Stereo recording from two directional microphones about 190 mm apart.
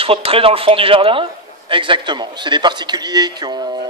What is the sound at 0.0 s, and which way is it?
A man's voice, 30° right (ahead or behind).